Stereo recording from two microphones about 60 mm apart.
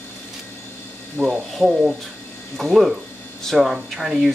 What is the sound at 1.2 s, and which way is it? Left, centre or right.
Speech, centre.